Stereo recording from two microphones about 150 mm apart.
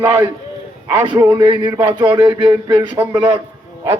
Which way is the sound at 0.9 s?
30° right (ahead or behind).